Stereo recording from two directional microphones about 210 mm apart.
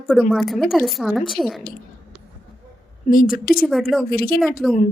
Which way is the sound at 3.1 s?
40° left (ahead or behind).